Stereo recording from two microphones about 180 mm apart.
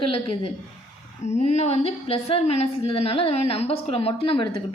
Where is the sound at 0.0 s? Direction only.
30° left (ahead or behind).